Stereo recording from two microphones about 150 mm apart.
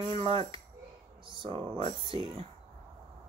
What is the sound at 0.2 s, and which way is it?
Speech, 40° right (ahead or behind).